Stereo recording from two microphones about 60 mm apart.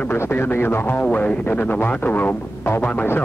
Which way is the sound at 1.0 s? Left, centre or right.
Left.